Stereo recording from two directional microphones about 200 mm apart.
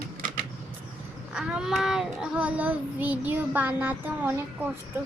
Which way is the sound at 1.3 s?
5° right (ahead or behind).